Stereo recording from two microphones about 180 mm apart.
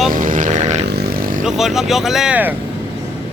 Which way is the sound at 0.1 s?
50° right (ahead or behind).